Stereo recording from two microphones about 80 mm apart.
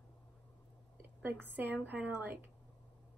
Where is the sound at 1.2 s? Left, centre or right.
Right.